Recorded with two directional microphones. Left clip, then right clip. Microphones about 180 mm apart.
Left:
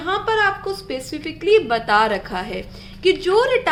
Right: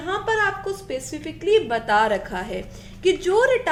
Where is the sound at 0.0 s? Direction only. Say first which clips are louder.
Left 3 dB; 25° left (ahead or behind).